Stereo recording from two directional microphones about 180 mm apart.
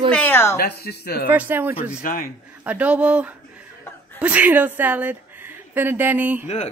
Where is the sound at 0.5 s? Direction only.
60° left (ahead or behind).